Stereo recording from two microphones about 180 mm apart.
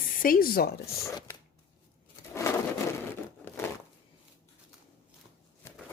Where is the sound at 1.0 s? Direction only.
15° left (ahead or behind).